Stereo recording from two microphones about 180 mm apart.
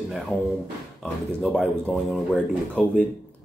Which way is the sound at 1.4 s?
Centre (ahead or behind).